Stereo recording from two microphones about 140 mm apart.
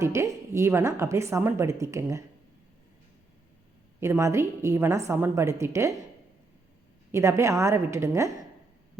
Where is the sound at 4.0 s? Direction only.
20° right (ahead or behind).